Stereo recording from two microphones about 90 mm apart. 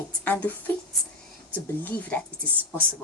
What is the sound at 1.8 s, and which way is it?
Speech, 20° left (ahead or behind).